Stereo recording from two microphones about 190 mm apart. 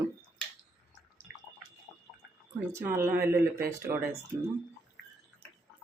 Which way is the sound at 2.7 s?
15° right (ahead or behind).